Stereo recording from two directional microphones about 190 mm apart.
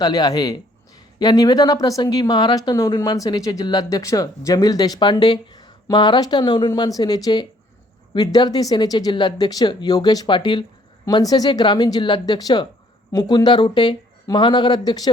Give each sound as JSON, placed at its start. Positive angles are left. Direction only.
{"t": 0.0, "sound": "a man's voice", "side_deg": 20}